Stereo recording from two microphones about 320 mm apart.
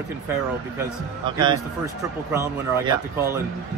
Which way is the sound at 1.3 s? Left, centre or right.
Centre.